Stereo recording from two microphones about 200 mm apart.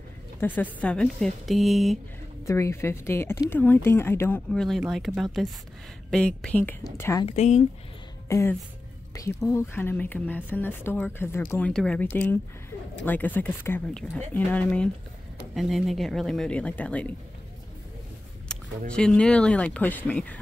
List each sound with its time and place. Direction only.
0.4 s speech: 10° left (ahead or behind)
2.4 s speech: 15° left (ahead or behind)
4.5 s speech: centre (ahead or behind); by 7.2 s 15° left (ahead or behind)
7.2 s speech: 35° left (ahead or behind)
8.3 s speech: 15° left (ahead or behind)
18.5 s speech: 5° left (ahead or behind)